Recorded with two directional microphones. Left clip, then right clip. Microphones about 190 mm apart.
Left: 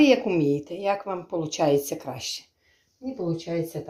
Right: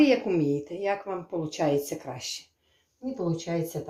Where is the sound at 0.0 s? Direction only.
25° left (ahead or behind).